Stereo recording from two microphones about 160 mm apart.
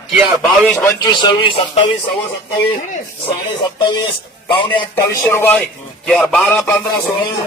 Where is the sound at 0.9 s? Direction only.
25° left (ahead or behind).